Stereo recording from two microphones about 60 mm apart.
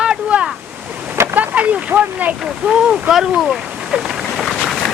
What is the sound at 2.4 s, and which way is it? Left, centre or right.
Speech, centre.